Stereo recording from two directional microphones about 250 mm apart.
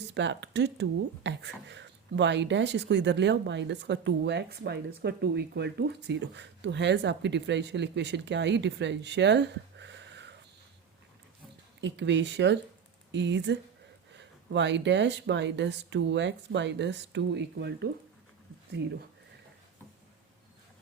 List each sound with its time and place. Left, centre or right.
0.1 s speech: right
11.8 s speech: right